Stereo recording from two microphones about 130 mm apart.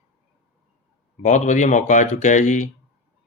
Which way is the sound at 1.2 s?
65° left (ahead or behind).